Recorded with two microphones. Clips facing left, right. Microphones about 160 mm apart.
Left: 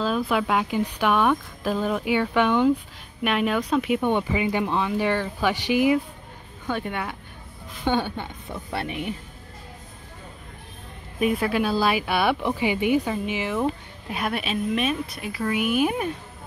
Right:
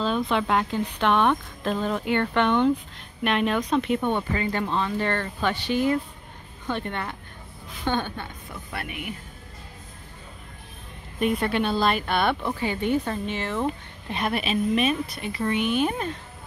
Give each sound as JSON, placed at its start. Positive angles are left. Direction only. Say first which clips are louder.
{"t": 0.0, "sound": "speech", "louder": "left 1 dB", "side_deg": 5}
{"t": 8.5, "sound": "speech", "louder": "left 5 dB", "side_deg": 30}
{"t": 11.1, "sound": "speech", "louder": "left 1 dB", "side_deg": 0}